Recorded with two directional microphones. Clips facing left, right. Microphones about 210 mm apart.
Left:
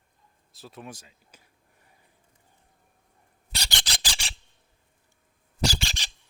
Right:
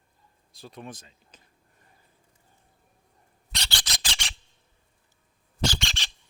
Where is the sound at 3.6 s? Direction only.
15° left (ahead or behind).